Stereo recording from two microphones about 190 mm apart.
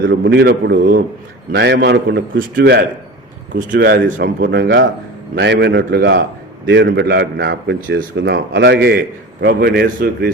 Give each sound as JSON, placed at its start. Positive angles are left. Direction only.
{"t": 0.1, "sound": "a man's voice", "side_deg": -60}